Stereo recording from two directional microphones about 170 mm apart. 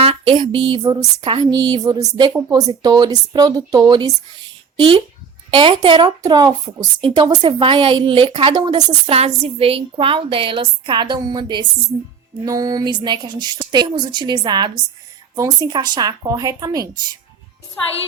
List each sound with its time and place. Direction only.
0.0 s a woman's voice: 35° right (ahead or behind)